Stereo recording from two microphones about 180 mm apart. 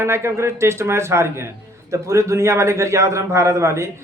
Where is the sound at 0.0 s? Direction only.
15° right (ahead or behind).